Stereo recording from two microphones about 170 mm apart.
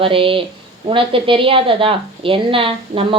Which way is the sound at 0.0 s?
30° right (ahead or behind).